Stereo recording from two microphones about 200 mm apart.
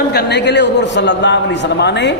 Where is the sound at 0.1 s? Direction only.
55° left (ahead or behind).